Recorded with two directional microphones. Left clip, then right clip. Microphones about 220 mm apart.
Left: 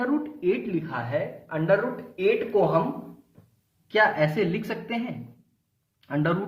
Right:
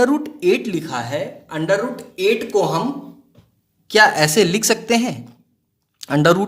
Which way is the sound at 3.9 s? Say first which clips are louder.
Right 8 dB; 45° right (ahead or behind).